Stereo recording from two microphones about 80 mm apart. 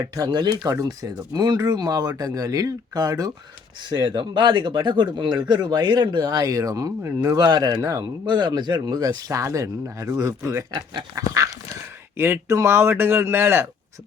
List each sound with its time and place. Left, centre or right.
0.0 s speech: right
0.3 s speech: right
3.8 s speech: right
8.3 s speech: right
12.1 s speech: right